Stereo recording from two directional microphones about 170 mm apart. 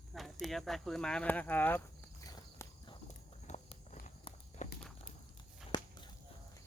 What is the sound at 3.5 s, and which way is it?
Walk, 40° left (ahead or behind).